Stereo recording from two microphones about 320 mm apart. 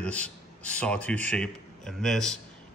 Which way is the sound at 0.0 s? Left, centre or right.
Centre.